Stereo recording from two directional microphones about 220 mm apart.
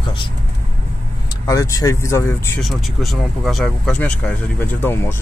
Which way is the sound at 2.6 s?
Centre (ahead or behind).